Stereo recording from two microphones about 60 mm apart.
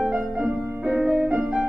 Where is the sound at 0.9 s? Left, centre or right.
Centre.